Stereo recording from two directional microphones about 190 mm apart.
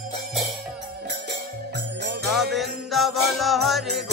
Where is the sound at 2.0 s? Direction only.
60° right (ahead or behind).